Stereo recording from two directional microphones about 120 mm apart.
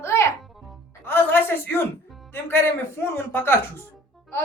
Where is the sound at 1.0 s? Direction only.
15° left (ahead or behind).